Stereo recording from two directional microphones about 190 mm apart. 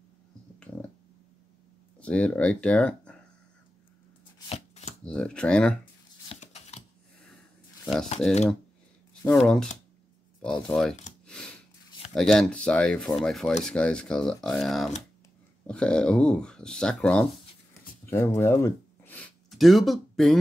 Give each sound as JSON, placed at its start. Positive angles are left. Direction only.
{"t": 2.0, "sound": "speech", "side_deg": 5}
{"t": 4.5, "sound": "chopping", "side_deg": 35}
{"t": 5.0, "sound": "speech", "side_deg": 5}
{"t": 6.2, "sound": "a sound", "side_deg": 35}
{"t": 7.8, "sound": "speech", "side_deg": 5}
{"t": 9.2, "sound": "speech", "side_deg": 5}
{"t": 11.2, "sound": "a sound", "side_deg": 5}
{"t": 12.1, "sound": "speech", "side_deg": 0}
{"t": 18.1, "sound": "a sound", "side_deg": 15}